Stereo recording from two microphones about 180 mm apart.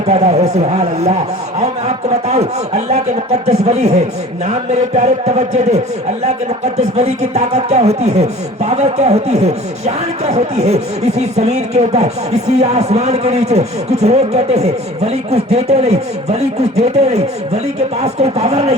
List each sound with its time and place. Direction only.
0.1 s speech: 35° right (ahead or behind)